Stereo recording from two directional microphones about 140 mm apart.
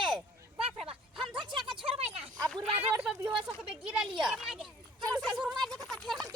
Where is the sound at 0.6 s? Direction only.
40° right (ahead or behind).